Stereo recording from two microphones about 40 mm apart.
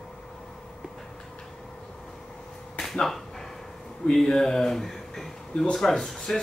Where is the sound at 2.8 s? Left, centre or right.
Centre.